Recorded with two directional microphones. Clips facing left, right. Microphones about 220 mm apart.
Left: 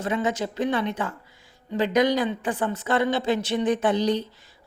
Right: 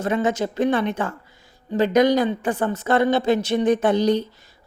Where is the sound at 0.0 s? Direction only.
45° right (ahead or behind).